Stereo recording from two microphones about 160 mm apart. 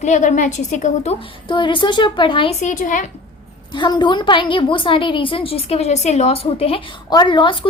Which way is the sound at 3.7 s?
30° left (ahead or behind).